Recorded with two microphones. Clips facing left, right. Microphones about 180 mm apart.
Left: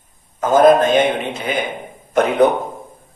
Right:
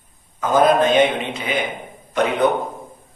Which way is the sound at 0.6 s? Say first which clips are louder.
Left 3 dB; 45° left (ahead or behind).